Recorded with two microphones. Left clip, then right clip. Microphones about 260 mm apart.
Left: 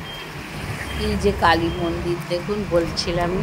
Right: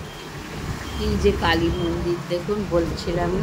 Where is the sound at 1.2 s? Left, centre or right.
Centre.